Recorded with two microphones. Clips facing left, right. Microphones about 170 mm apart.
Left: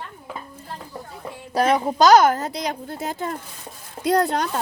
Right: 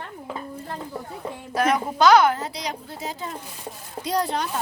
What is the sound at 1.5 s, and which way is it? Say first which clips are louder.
A woman's voice: left 3 dB; 30° left (ahead or behind).